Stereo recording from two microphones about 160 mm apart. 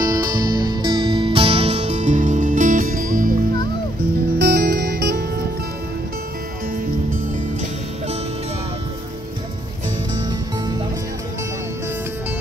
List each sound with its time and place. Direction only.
0.0 s music: 25° right (ahead or behind); by 3.3 s 55° right (ahead or behind)
4.4 s music: 85° right